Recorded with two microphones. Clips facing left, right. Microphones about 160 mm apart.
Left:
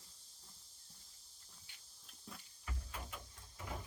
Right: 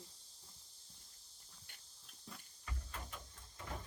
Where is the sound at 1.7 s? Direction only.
55° right (ahead or behind).